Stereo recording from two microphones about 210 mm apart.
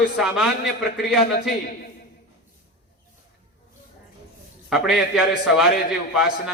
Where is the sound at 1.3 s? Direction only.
50° left (ahead or behind).